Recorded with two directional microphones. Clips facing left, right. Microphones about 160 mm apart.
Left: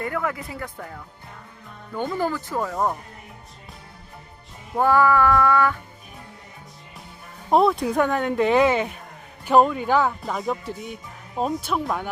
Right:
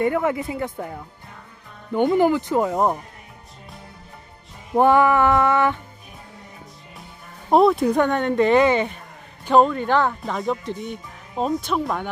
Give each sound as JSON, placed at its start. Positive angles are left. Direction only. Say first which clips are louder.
{"t": 0.0, "sound": "speech", "louder": "right 7 dB", "side_deg": -20}
{"t": 4.7, "sound": "speech", "louder": "right 3 dB", "side_deg": -20}
{"t": 7.5, "sound": "speech", "louder": "right 3 dB", "side_deg": 0}